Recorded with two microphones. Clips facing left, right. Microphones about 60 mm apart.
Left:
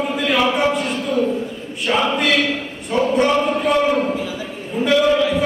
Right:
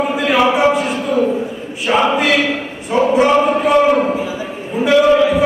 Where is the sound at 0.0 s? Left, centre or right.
Centre.